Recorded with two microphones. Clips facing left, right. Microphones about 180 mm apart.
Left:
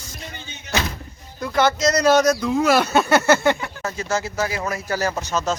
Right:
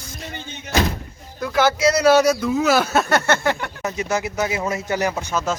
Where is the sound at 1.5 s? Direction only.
5° right (ahead or behind).